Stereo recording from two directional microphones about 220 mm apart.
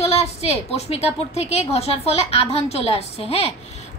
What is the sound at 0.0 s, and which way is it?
A woman's voice, 30° left (ahead or behind).